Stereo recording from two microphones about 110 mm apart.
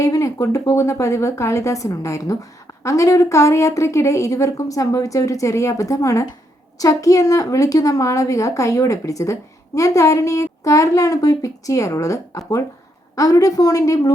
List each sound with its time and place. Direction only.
0.0 s a woman's voice: 30° left (ahead or behind)